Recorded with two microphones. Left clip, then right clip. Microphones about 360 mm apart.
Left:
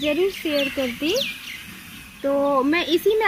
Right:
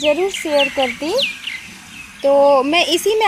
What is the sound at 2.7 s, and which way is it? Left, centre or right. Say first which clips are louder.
Speech: right 4 dB; centre.